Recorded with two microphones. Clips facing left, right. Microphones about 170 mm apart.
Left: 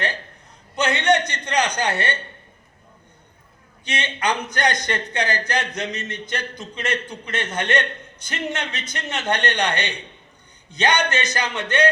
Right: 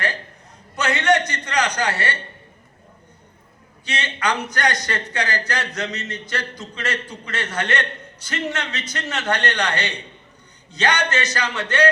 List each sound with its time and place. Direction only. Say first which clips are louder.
0.8 s a man's voice: even; 25° left (ahead or behind)
3.8 s a man's voice: even; 20° left (ahead or behind)